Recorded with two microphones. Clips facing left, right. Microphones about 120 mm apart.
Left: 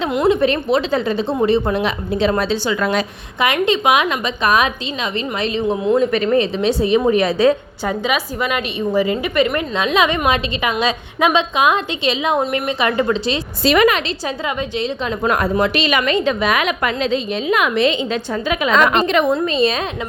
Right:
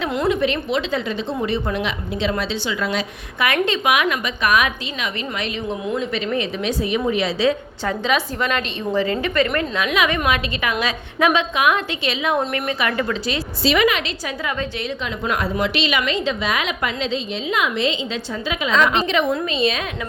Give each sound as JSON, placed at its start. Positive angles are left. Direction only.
{"t": 0.3, "sound": "a woman's voice", "side_deg": 40}
{"t": 3.4, "sound": "a woman's voice", "side_deg": 20}
{"t": 6.0, "sound": "a woman's voice", "side_deg": 50}
{"t": 7.1, "sound": "a woman's voice", "side_deg": 50}
{"t": 7.9, "sound": "a woman's voice", "side_deg": 10}
{"t": 9.7, "sound": "a woman's voice", "side_deg": 25}
{"t": 13.7, "sound": "a woman's voice", "side_deg": 45}
{"t": 14.4, "sound": "a woman's voice", "side_deg": 25}
{"t": 15.0, "sound": "a woman's voice", "side_deg": 45}